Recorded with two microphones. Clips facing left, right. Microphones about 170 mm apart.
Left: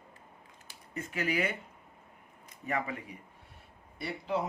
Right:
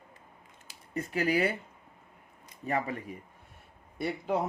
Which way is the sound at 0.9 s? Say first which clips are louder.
Right 5 dB; 35° right (ahead or behind).